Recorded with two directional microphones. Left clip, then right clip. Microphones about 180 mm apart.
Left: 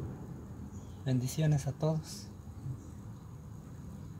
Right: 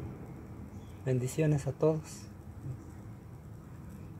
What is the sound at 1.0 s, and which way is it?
Speech, 40° right (ahead or behind).